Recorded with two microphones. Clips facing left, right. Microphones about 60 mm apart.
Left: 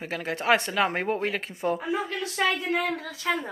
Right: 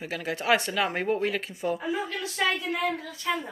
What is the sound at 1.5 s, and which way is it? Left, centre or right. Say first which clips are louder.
Speech: left 2 dB; left.